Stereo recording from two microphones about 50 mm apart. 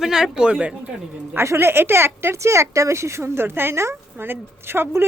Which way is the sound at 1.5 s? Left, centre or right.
Right.